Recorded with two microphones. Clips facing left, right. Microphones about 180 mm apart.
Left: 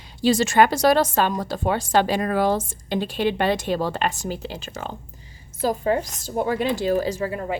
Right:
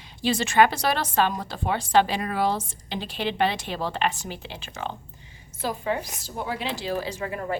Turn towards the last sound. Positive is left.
turn(degrees=20)  # may be behind; listen again after turning